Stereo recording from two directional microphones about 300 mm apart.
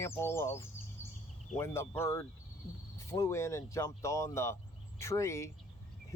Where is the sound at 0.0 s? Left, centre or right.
Centre.